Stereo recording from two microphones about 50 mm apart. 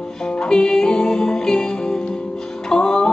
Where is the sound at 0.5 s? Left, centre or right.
Centre.